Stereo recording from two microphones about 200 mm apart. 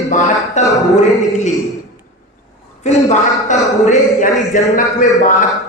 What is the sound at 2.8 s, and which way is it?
A man's voice, 35° left (ahead or behind).